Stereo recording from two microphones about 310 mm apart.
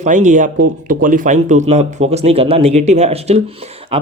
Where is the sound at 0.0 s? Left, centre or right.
Right.